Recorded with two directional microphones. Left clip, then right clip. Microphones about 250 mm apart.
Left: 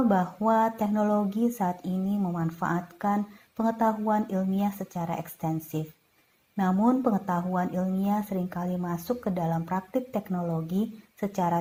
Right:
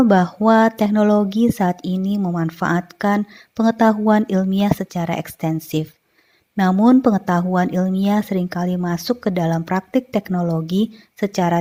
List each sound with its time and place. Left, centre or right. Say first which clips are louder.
0.1 s speech: right 10 dB; right